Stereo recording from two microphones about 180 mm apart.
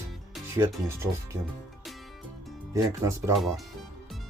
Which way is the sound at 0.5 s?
15° right (ahead or behind).